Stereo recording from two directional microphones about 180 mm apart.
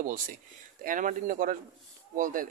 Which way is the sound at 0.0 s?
45° right (ahead or behind).